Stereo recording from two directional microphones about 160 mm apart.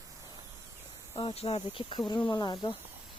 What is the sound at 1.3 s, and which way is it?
Speech, 40° left (ahead or behind).